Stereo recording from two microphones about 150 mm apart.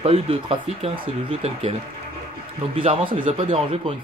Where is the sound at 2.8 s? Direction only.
35° right (ahead or behind).